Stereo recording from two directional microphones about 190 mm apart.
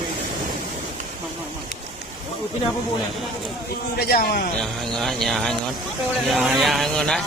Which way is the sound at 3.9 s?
55° left (ahead or behind).